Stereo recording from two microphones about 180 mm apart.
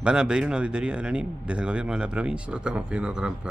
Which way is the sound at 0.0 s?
5° right (ahead or behind).